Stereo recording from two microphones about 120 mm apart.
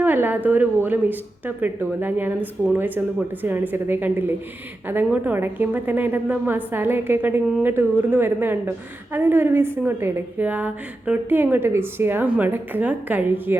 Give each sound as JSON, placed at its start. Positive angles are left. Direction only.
{"t": 0.0, "sound": "a woman's voice", "side_deg": -15}